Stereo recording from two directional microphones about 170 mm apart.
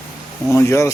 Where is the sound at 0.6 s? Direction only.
15° left (ahead or behind).